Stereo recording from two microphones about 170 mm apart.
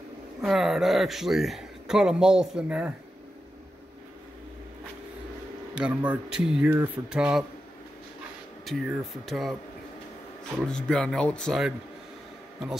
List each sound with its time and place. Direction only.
0.4 s speech: centre (ahead or behind)
5.8 s speech: 5° right (ahead or behind)
8.6 s speech: centre (ahead or behind)
10.7 s speech: 5° left (ahead or behind)